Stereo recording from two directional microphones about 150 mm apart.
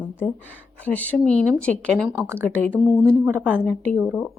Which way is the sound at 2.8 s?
15° right (ahead or behind).